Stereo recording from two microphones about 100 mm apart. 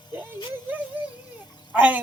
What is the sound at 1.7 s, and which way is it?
Frog, 15° right (ahead or behind).